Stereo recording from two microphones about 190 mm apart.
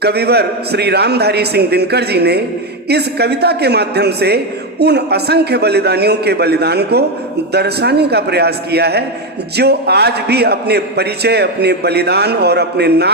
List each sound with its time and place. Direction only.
0.0 s a man's voice: 60° right (ahead or behind)